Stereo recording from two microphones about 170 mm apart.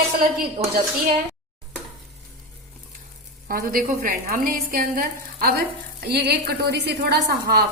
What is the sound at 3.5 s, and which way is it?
A woman's voice, 60° right (ahead or behind).